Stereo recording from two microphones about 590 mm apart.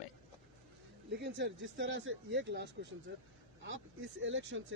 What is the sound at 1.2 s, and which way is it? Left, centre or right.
Speech, centre.